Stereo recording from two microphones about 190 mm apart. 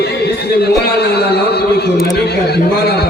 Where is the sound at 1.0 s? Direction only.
55° left (ahead or behind).